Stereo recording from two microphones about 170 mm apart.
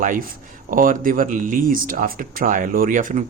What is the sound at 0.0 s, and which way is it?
Speech, 50° right (ahead or behind).